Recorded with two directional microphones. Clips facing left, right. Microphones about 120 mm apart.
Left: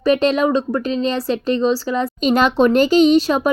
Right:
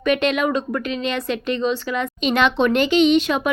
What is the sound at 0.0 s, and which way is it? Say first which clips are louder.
Speech: left 4 dB; 35° left (ahead or behind).